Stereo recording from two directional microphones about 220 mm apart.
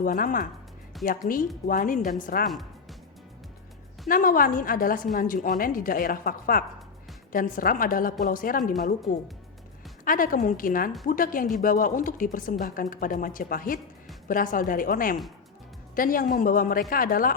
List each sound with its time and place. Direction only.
0.0 s a woman's voice: 40° left (ahead or behind)
4.1 s a woman's voice: 40° left (ahead or behind)
10.0 s a woman's voice: 40° left (ahead or behind)